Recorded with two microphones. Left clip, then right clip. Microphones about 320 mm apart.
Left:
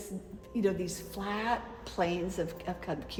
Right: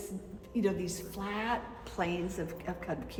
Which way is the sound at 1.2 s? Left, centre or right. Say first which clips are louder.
Left 2 dB; left.